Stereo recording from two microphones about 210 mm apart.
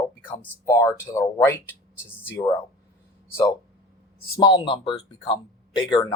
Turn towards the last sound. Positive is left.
turn(degrees=20)  # may be behind; listen again after turning